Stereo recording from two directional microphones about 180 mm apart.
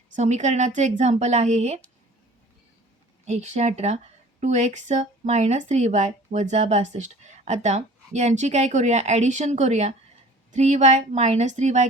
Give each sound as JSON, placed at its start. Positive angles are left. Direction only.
{"t": 0.2, "sound": "speech", "side_deg": -40}
{"t": 3.2, "sound": "speech", "side_deg": -40}